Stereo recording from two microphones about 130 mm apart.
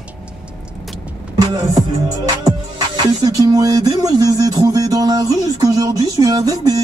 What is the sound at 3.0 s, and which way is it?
Music, 30° right (ahead or behind).